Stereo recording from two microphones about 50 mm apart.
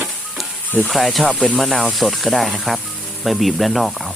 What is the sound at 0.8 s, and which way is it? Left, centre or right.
Speech, centre.